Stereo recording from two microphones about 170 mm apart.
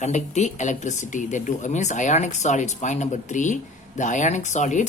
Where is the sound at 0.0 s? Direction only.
45° left (ahead or behind).